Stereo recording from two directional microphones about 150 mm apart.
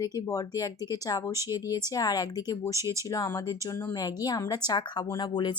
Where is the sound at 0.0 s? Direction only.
20° left (ahead or behind).